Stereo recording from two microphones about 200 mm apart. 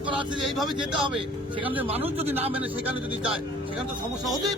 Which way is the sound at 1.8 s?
30° right (ahead or behind).